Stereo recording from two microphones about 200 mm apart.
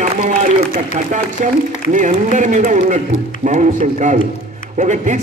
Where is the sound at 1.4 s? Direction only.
40° right (ahead or behind).